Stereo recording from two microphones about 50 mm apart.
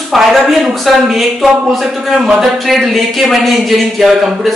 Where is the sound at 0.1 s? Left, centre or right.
Centre.